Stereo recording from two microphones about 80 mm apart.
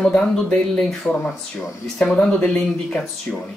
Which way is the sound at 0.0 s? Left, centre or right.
Centre.